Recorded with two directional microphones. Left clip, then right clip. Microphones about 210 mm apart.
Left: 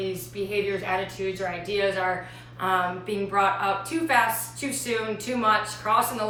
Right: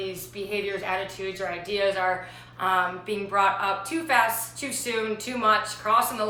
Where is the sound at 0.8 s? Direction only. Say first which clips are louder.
Left 1 dB; 15° right (ahead or behind).